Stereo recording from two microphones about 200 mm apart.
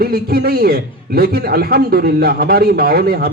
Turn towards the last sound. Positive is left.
turn(degrees=-50)  # may be behind; listen again after turning